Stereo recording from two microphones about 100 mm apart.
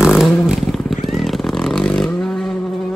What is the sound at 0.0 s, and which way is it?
Vehicle, 5° right (ahead or behind).